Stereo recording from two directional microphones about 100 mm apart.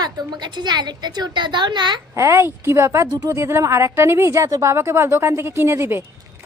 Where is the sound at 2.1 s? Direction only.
30° right (ahead or behind).